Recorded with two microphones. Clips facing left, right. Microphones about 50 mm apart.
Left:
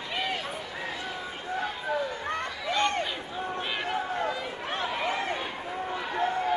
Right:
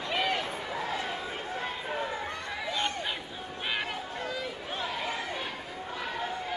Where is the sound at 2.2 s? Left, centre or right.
Left.